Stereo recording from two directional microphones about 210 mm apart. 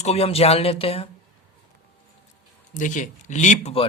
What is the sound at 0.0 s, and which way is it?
Speech, 30° left (ahead or behind).